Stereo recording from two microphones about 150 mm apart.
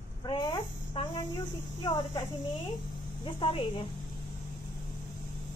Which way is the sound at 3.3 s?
35° left (ahead or behind).